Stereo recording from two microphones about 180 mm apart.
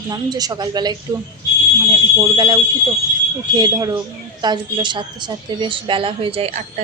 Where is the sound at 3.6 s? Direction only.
20° right (ahead or behind).